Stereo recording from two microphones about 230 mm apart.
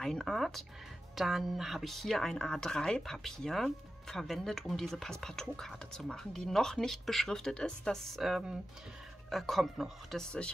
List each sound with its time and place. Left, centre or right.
0.0 s speech: centre